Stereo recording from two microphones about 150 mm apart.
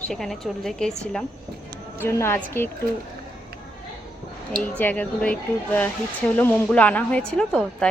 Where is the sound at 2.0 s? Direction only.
15° left (ahead or behind).